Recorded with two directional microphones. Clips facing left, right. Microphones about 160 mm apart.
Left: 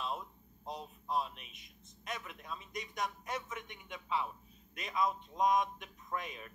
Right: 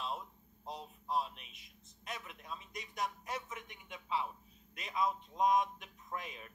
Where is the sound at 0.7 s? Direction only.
30° right (ahead or behind).